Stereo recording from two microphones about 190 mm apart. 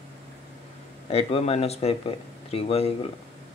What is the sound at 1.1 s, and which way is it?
Speech, 35° left (ahead or behind).